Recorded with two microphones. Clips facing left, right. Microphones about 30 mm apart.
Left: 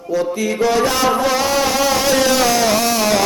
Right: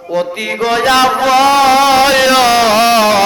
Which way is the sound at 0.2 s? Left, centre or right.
Right.